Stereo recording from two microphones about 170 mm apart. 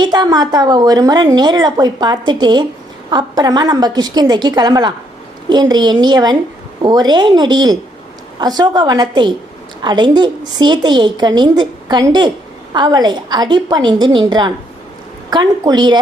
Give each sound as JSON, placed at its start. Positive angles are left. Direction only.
{"t": 0.0, "sound": "a woman's voice", "side_deg": -25}